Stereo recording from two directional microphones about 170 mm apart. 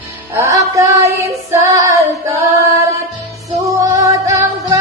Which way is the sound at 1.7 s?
20° right (ahead or behind).